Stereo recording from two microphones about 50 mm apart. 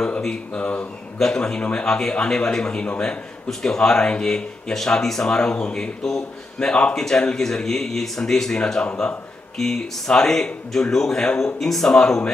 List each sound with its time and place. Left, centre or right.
0.6 s a man's voice: left
1.1 s speech: centre